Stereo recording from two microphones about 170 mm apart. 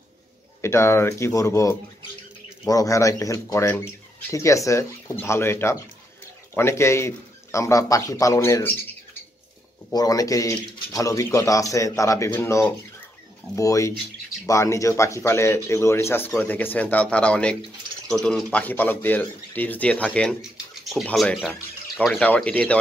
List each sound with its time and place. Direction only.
0.6 s speech: 15° left (ahead or behind)
9.9 s speech: 20° left (ahead or behind)